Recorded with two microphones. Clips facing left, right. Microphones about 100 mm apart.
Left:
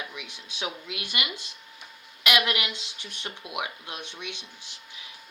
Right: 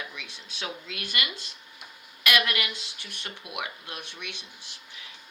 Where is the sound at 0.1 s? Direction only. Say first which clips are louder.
Left 2 dB; 15° left (ahead or behind).